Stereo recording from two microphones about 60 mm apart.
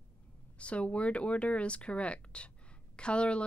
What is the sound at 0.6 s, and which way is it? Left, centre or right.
Speech, left.